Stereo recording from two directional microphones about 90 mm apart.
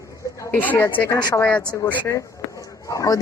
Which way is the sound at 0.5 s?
20° left (ahead or behind).